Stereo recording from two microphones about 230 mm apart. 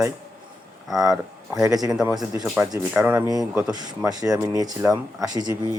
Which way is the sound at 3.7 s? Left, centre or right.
Centre.